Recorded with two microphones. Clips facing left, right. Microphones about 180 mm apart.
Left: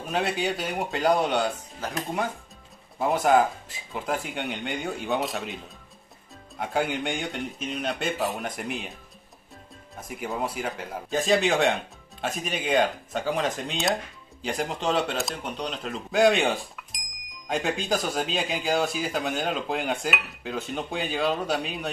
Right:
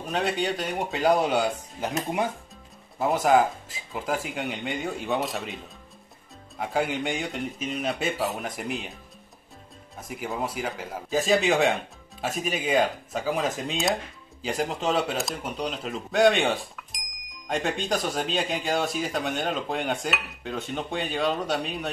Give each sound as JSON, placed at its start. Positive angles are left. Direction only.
{"t": 0.1, "sound": "a man's voice", "side_deg": 5}
{"t": 1.8, "sound": "speech", "side_deg": -20}
{"t": 3.0, "sound": "a man's voice", "side_deg": 0}
{"t": 6.6, "sound": "a man's voice", "side_deg": 0}
{"t": 9.9, "sound": "a man's voice", "side_deg": 0}